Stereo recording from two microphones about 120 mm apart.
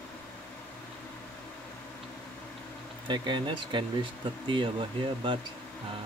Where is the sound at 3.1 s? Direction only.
40° right (ahead or behind).